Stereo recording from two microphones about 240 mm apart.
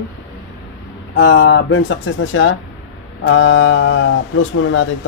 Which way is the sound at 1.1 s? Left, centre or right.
Left.